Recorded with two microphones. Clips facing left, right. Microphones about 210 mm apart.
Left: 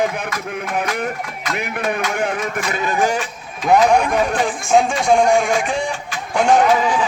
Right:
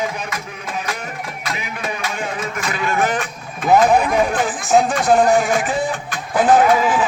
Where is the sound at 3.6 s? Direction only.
5° right (ahead or behind).